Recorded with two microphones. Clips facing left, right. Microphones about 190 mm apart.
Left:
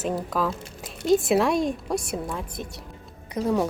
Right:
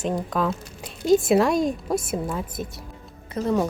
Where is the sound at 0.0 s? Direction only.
5° left (ahead or behind).